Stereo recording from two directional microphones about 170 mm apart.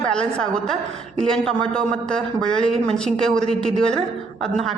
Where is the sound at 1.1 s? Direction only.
5° left (ahead or behind).